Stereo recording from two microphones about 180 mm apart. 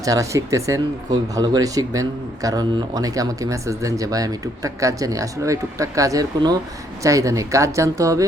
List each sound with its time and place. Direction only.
0.0 s speech: 20° right (ahead or behind)